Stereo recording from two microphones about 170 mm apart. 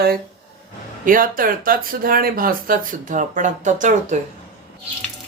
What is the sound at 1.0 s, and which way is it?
Speech, 55° right (ahead or behind).